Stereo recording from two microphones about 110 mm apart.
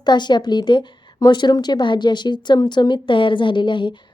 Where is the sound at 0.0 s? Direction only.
40° left (ahead or behind).